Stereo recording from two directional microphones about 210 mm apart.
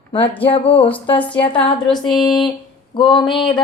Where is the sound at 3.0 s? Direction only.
20° left (ahead or behind).